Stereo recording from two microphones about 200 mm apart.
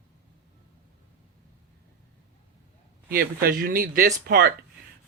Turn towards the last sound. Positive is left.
turn(degrees=-45)  # may be behind; listen again after turning